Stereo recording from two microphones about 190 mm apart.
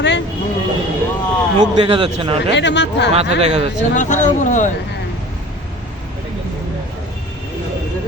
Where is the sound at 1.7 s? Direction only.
30° right (ahead or behind).